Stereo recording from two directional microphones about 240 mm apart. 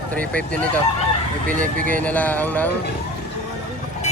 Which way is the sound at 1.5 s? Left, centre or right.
Right.